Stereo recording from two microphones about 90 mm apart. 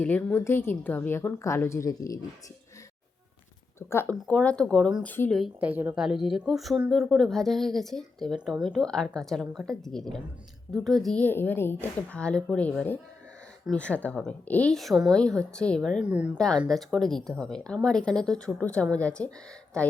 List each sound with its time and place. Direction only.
0.0 s a woman's voice: 15° left (ahead or behind); by 2.1 s 40° left (ahead or behind)
3.8 s speech: 30° left (ahead or behind)
4.3 s speech: 15° left (ahead or behind)
5.0 s a woman's voice: 25° left (ahead or behind)
5.5 s a woman's voice: 20° right (ahead or behind)
5.9 s speech: 5° right (ahead or behind)
11.2 s speech: 20° left (ahead or behind)
13.7 s speech: 15° left (ahead or behind)
14.7 s speech: centre (ahead or behind)
16.0 s speech: 15° right (ahead or behind)
16.6 s speech: 5° left (ahead or behind)